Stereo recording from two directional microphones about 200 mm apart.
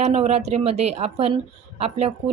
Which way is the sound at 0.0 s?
35° right (ahead or behind).